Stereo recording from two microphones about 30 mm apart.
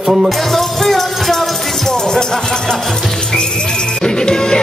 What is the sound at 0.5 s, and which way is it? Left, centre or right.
Music, centre.